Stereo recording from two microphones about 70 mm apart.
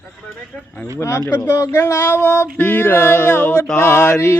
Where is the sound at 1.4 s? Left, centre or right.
Left.